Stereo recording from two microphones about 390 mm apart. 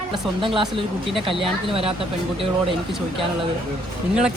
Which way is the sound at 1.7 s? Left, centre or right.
Centre.